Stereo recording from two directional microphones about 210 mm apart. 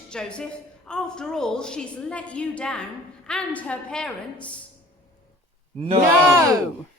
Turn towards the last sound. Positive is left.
turn(degrees=-10)  # may be behind; listen again after turning